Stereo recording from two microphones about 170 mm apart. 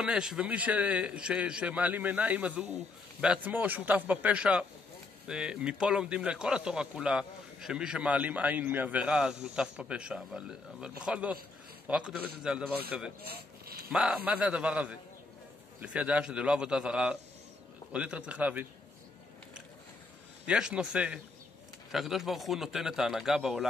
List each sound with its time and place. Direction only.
0.0 s a man's voice: 5° right (ahead or behind)
13.2 s a sound: 65° right (ahead or behind)
13.8 s a man's voice: 5° right (ahead or behind)
20.4 s a man's voice: 5° right (ahead or behind)